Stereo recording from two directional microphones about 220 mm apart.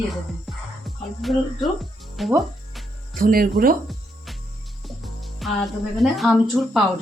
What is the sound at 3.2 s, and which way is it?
Speech, 40° right (ahead or behind).